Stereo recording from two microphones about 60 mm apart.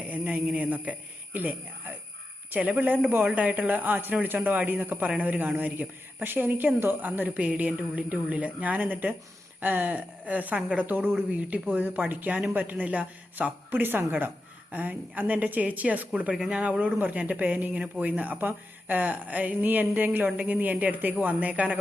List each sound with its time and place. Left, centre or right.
0.1 s a woman's voice: right